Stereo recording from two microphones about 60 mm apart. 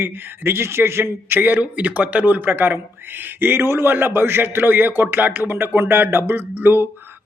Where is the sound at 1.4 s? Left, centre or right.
Right.